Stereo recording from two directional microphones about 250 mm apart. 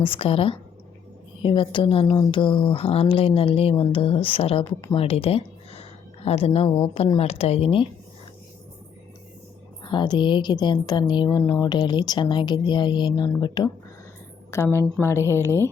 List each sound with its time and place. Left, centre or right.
0.0 s speech: left
9.8 s a woman's voice: centre